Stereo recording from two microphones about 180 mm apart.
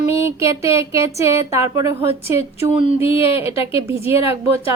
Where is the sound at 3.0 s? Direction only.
30° left (ahead or behind).